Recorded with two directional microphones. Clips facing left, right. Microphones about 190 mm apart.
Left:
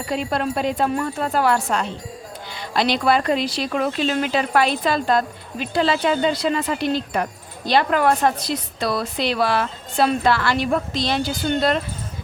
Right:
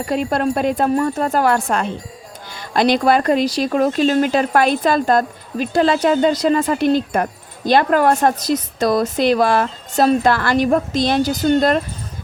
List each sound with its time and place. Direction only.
0.1 s speech: 50° right (ahead or behind)